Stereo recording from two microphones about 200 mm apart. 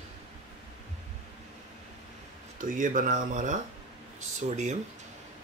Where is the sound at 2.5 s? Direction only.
40° right (ahead or behind).